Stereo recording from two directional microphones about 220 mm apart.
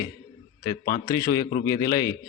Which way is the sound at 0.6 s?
15° left (ahead or behind).